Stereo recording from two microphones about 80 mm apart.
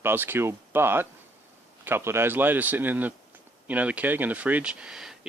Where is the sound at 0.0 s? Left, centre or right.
Right.